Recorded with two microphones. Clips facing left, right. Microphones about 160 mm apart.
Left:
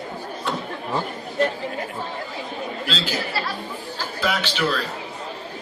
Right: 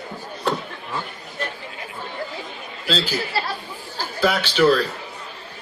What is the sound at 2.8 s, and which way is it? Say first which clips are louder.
A man's voice: right 6 dB; 40° right (ahead or behind).